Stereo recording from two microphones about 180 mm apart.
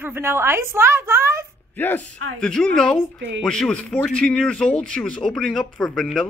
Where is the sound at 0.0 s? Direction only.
15° right (ahead or behind).